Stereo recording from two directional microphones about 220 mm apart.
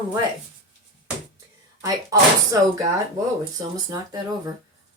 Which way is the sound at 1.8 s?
15° right (ahead or behind).